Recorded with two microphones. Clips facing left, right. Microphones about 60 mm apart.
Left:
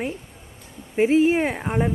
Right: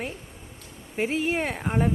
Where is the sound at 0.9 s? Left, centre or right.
Left.